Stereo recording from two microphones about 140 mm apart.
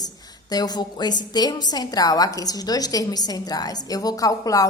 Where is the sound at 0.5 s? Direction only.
30° left (ahead or behind).